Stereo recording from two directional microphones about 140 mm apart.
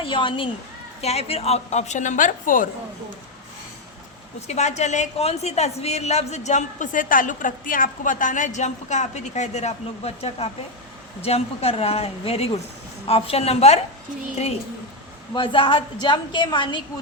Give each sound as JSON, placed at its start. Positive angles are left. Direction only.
{"t": 0.0, "sound": "a woman's voice", "side_deg": 35}
{"t": 1.0, "sound": "a woman's voice", "side_deg": 45}
{"t": 4.4, "sound": "a woman's voice", "side_deg": 50}
{"t": 15.4, "sound": "a woman's voice", "side_deg": 40}